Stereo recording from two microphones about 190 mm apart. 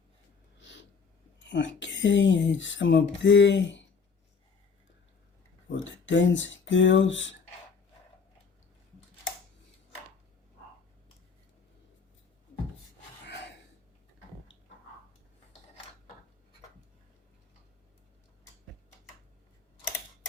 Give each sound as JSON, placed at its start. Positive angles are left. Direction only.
{"t": 0.6, "sound": "a sound", "side_deg": 70}
{"t": 1.4, "sound": "speech", "side_deg": 70}
{"t": 5.6, "sound": "speech", "side_deg": 75}
{"t": 13.2, "sound": "gasp", "side_deg": 65}